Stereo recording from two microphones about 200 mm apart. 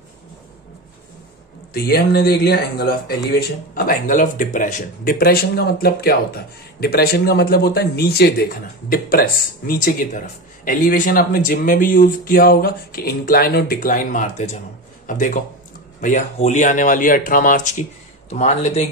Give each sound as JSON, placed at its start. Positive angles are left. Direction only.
{"t": 1.7, "sound": "speech", "side_deg": 50}